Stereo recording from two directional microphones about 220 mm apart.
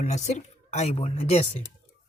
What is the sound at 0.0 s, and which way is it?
Speech, 30° left (ahead or behind).